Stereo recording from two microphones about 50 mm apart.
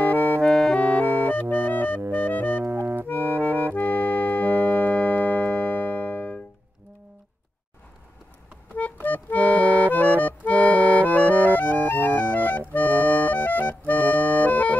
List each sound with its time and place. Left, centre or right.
0.0 s music: left
0.4 s music: centre
0.7 s music: left
2.6 s accordion: right
3.7 s organ: left
5.4 s keyboard: left
9.0 s accordion: left
11.4 s music: left